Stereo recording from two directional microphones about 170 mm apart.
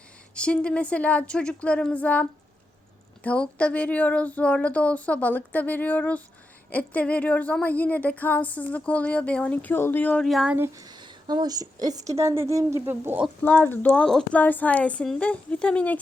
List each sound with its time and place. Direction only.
0.3 s a woman's voice: 5° left (ahead or behind)
3.2 s a woman's voice: 5° left (ahead or behind)
10.8 s speech: 25° right (ahead or behind)
13.4 s a woman's voice: 10° left (ahead or behind)